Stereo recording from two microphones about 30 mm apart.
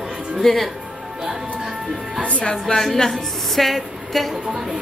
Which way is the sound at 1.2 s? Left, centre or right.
Centre.